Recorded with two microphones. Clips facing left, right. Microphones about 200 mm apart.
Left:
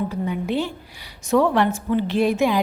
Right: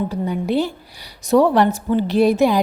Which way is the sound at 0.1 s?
35° right (ahead or behind).